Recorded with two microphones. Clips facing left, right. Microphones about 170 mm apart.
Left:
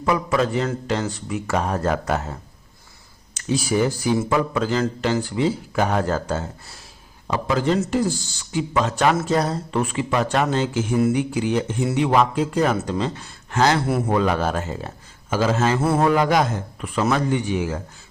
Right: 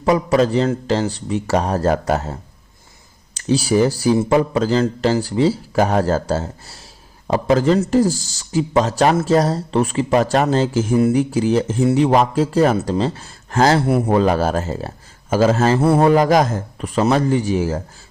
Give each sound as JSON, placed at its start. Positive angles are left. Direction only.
{"t": 0.0, "sound": "speech", "side_deg": -35}